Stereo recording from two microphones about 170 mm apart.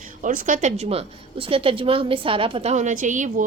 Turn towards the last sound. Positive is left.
turn(degrees=-45)  # may be behind; listen again after turning